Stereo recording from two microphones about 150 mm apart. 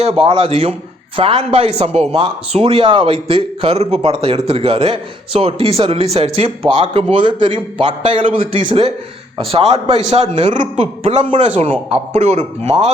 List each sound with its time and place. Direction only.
0.0 s a man's voice: 40° right (ahead or behind)